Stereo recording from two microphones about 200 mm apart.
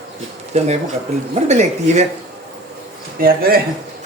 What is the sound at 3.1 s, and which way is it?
Speech, 50° right (ahead or behind).